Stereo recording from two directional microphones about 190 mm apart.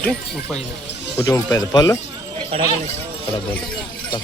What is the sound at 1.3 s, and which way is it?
Speech, 20° left (ahead or behind).